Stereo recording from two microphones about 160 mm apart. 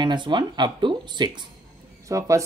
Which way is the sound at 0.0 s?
30° right (ahead or behind).